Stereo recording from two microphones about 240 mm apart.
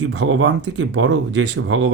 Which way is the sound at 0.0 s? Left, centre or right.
Right.